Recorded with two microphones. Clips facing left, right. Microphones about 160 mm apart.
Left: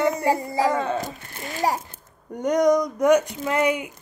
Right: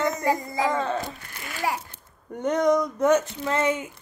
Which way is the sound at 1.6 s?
45° left (ahead or behind).